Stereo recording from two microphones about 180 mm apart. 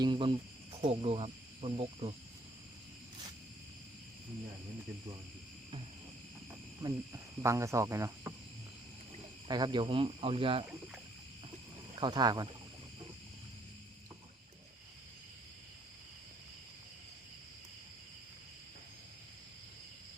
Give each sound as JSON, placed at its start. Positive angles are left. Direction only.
{"t": 0.0, "sound": "speech", "side_deg": -25}
{"t": 0.8, "sound": "cricket", "side_deg": -30}
{"t": 6.8, "sound": "speech", "side_deg": -20}
{"t": 9.5, "sound": "speech", "side_deg": -25}
{"t": 11.9, "sound": "speech", "side_deg": -25}